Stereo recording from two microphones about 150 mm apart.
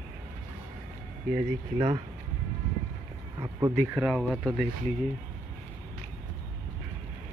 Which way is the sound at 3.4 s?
25° right (ahead or behind).